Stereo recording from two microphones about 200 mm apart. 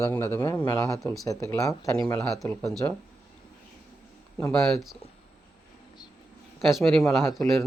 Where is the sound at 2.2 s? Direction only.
Centre (ahead or behind).